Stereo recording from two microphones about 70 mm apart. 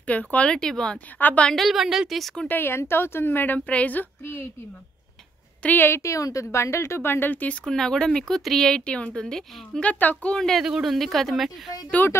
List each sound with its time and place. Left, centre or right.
0.0 s a woman's voice: centre
1.5 s speech: centre
2.4 s a woman's voice: left
5.6 s a woman's voice: left
5.9 s a woman's voice: left
7.6 s speech: centre
9.8 s a woman's voice: left
10.3 s speech: centre
10.6 s speech: centre
12.0 s a woman's voice: left